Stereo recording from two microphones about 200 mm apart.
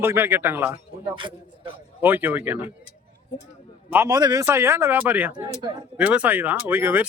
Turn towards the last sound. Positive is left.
turn(degrees=-10)  # may be behind; listen again after turning